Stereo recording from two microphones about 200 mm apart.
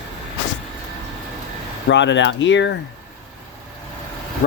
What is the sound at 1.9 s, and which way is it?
Speech, 65° left (ahead or behind).